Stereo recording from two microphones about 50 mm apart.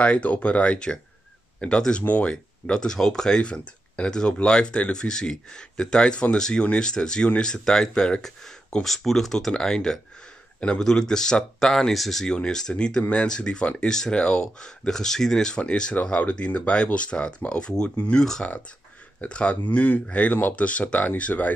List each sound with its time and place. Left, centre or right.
0.0 s speech: left
8.8 s speech: centre
19.2 s speech: left
19.6 s speech: left